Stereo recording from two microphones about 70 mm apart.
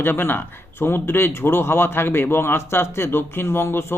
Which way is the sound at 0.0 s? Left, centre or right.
Left.